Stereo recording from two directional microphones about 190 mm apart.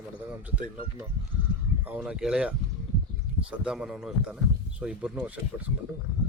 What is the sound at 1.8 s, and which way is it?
Speech, 5° right (ahead or behind).